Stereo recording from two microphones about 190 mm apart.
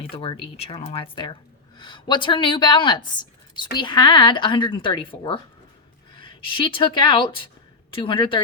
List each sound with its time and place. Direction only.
0.2 s speech: 30° left (ahead or behind)